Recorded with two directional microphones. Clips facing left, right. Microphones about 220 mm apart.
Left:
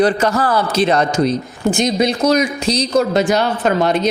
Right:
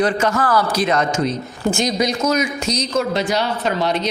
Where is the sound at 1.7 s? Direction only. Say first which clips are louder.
Left 4 dB; 25° left (ahead or behind).